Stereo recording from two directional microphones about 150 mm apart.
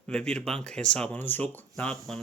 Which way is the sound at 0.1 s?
5° left (ahead or behind).